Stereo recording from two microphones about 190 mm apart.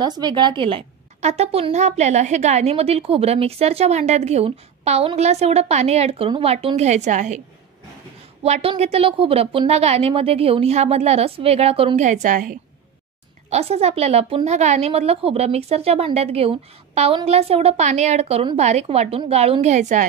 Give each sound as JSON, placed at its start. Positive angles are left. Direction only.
{"t": 0.0, "sound": "a woman's voice", "side_deg": -20}
{"t": 8.5, "sound": "a woman's voice", "side_deg": -35}
{"t": 13.5, "sound": "a woman's voice", "side_deg": -35}